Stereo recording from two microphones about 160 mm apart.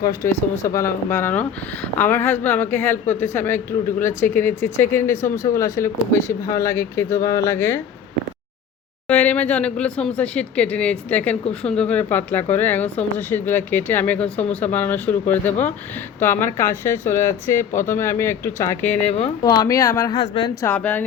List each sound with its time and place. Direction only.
0.0 s a man's voice: 20° left (ahead or behind)
9.0 s a man's voice: 10° left (ahead or behind)
19.4 s speech: 25° left (ahead or behind)
20.1 s speech: 35° left (ahead or behind)
20.7 s a man's voice: 10° left (ahead or behind)